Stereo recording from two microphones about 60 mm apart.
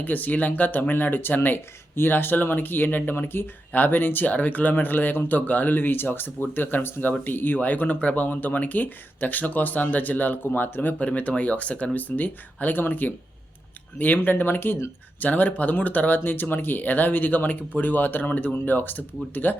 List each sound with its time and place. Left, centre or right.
0.0 s speech: left